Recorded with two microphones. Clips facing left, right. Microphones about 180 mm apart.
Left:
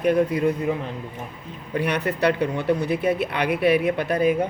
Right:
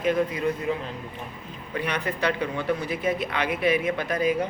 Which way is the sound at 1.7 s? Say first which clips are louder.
Left 5 dB; 65° left (ahead or behind).